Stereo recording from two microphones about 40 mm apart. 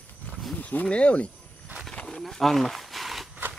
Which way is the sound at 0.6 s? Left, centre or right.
Left.